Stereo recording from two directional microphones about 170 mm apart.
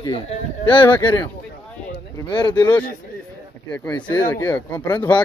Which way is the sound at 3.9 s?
25° left (ahead or behind).